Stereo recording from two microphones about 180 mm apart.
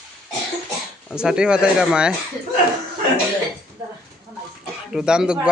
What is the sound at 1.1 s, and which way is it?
A man's voice, 5° right (ahead or behind).